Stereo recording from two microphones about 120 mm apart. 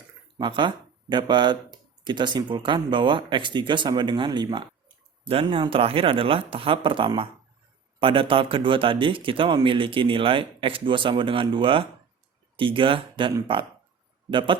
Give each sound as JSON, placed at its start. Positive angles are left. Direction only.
{"t": 0.3, "sound": "speech", "side_deg": -40}
{"t": 5.3, "sound": "speech", "side_deg": -50}